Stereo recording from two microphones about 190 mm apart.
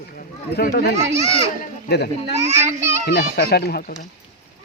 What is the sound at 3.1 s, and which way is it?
Speech, 60° left (ahead or behind).